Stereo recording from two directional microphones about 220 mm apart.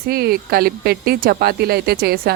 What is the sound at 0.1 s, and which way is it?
A woman's voice, 45° right (ahead or behind).